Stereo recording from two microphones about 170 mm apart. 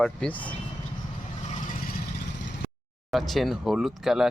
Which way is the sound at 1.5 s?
50° left (ahead or behind).